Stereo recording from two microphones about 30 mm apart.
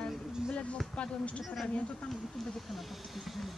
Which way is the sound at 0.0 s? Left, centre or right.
Left.